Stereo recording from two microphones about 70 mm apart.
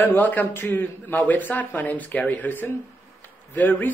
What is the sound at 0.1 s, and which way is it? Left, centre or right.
Speech, left.